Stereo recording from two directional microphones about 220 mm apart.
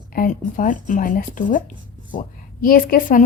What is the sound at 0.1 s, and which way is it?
A woman's voice, 40° left (ahead or behind).